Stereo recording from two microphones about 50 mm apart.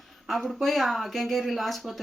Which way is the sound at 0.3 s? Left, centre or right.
Centre.